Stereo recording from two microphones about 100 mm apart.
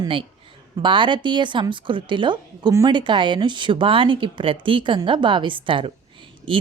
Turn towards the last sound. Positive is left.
turn(degrees=-60)  # may be behind; listen again after turning